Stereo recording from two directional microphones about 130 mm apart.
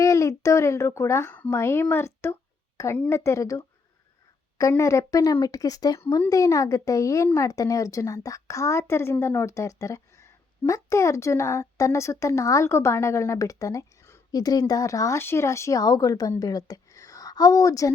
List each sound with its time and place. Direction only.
0.0 s a child's voice: 25° left (ahead or behind)
4.7 s a woman's voice: 20° left (ahead or behind)